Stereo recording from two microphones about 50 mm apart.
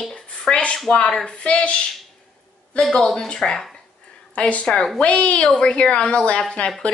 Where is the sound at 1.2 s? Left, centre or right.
Left.